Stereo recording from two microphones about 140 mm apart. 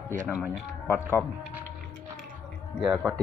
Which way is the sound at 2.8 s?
5° right (ahead or behind).